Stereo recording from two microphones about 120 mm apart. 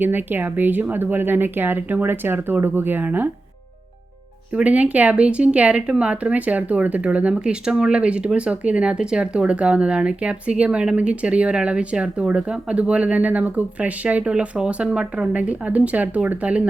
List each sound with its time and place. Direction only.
0.0 s speech: 15° right (ahead or behind)
4.5 s speech: 10° right (ahead or behind)